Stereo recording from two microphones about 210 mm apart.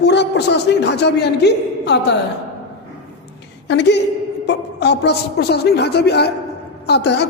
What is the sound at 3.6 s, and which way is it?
A woman's voice, 55° left (ahead or behind).